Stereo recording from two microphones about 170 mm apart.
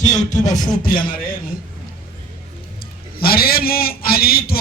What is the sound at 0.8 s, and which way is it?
Speech, 55° left (ahead or behind).